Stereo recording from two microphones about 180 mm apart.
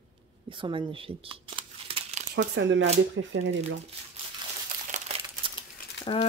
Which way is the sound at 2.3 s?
80° right.